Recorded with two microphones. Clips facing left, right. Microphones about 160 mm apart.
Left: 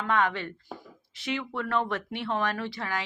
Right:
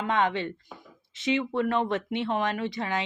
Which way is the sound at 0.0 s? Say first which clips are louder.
Right 1 dB; 20° right (ahead or behind).